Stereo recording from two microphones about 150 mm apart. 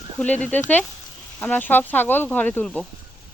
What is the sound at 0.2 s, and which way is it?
Speech, 10° left (ahead or behind).